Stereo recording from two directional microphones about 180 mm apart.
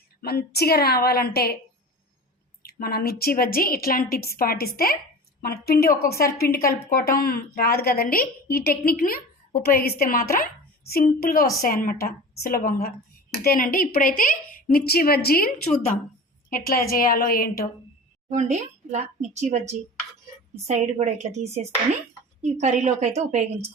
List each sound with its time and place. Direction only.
0.2 s a woman's voice: 60° left (ahead or behind)
2.6 s a woman's voice: 55° left (ahead or behind)
16.5 s a woman's voice: 55° left (ahead or behind)
18.3 s speech: 40° right (ahead or behind)